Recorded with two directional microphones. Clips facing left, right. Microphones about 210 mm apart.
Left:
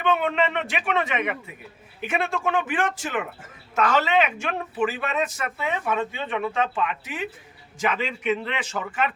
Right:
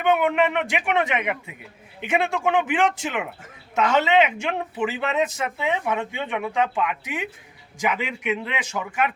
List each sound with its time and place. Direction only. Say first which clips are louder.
0.0 s a man's voice: right 3 dB; 10° right (ahead or behind)